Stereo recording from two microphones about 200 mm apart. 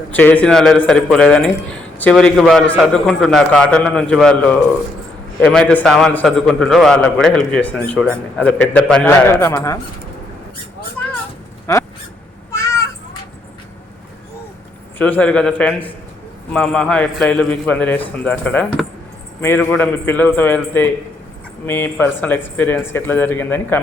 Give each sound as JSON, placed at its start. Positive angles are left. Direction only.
{"t": 0.1, "sound": "a man's voice", "side_deg": 10}
{"t": 5.4, "sound": "a man's voice", "side_deg": 5}
{"t": 11.6, "sound": "speech", "side_deg": 15}
{"t": 12.5, "sound": "cat", "side_deg": 15}
{"t": 14.9, "sound": "a man's voice", "side_deg": 10}